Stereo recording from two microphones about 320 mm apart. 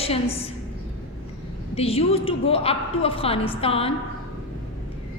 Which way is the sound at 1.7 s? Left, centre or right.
Centre.